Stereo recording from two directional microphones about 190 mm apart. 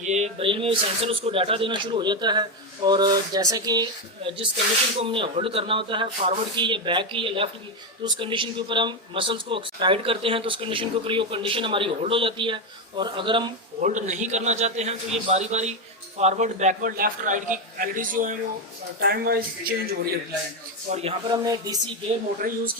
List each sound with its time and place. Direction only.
0.0 s speech: 35° right (ahead or behind)
13.8 s a man's voice: 40° right (ahead or behind)
20.9 s a man's voice: 30° right (ahead or behind)
21.4 s speech: 20° right (ahead or behind)
22.4 s a man's voice: 50° right (ahead or behind)